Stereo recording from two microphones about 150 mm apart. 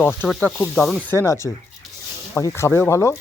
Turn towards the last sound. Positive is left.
turn(degrees=15)  # may be behind; listen again after turning